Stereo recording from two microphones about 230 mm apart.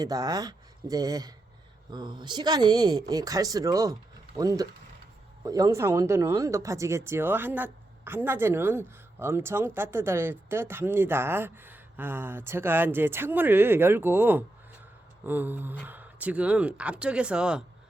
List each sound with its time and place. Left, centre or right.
0.0 s speech: centre